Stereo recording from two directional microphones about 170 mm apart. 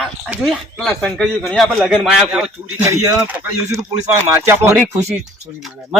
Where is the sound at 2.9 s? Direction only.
20° right (ahead or behind).